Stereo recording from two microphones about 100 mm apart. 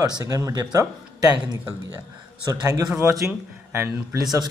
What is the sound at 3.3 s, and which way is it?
Speech, 20° right (ahead or behind).